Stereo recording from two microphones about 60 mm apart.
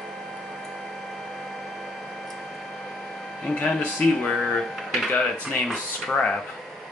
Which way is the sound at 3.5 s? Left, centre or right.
Left.